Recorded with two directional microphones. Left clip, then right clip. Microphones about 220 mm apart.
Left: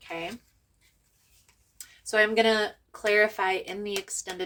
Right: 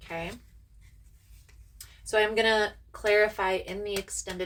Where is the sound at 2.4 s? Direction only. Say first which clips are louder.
Left 1 dB; 45° left (ahead or behind).